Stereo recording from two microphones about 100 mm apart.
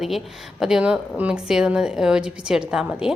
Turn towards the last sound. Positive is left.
turn(degrees=-5)  # may be behind; listen again after turning